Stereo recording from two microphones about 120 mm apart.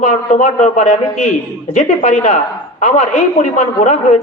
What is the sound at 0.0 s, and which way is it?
A woman's voice, 90° left.